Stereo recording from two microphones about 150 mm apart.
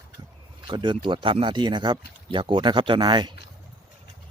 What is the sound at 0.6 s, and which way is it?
Speech, 30° right (ahead or behind).